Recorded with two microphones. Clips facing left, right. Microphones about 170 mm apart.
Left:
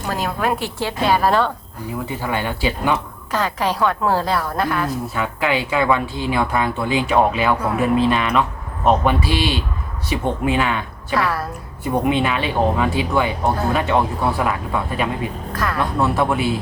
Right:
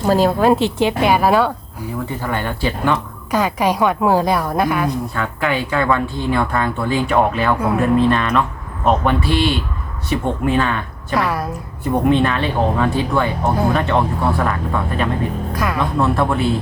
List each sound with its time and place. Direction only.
0.0 s a woman's voice: 30° right (ahead or behind); by 1.5 s 10° right (ahead or behind)
2.0 s speech: 10° left (ahead or behind)
3.3 s a woman's voice: 15° right (ahead or behind)
4.9 s speech: 5° left (ahead or behind)
11.1 s a woman's voice: 15° right (ahead or behind)
11.9 s speech: 10° left (ahead or behind)
15.5 s a woman's voice: 15° right (ahead or behind)
16.0 s speech: 10° left (ahead or behind)